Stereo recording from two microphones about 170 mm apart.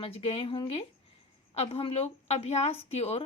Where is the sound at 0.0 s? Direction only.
35° left (ahead or behind).